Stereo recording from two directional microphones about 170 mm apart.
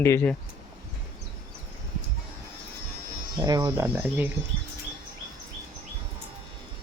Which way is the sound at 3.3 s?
25° right (ahead or behind).